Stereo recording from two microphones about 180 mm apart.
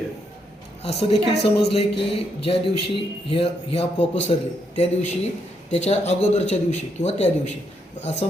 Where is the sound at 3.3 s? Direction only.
30° left (ahead or behind).